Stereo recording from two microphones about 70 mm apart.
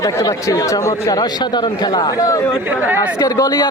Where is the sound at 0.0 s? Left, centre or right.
Left.